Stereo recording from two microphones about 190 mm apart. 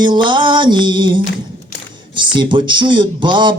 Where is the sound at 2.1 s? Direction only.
25° right (ahead or behind).